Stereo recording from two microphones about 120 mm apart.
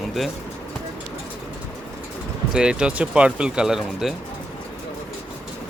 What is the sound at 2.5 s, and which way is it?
Speech, 5° right (ahead or behind).